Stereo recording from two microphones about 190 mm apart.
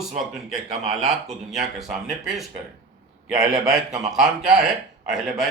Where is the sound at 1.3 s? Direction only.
Centre (ahead or behind).